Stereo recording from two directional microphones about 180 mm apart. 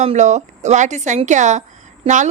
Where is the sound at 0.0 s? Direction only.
40° right (ahead or behind).